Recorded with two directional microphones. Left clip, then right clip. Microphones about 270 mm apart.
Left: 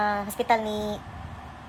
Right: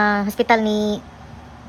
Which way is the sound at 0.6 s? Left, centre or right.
Right.